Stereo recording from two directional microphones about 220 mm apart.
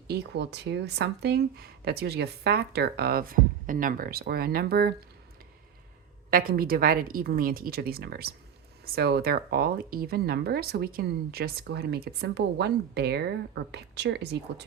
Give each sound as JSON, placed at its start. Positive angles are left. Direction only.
{"t": 0.1, "sound": "speech", "side_deg": -50}
{"t": 6.3, "sound": "speech", "side_deg": -40}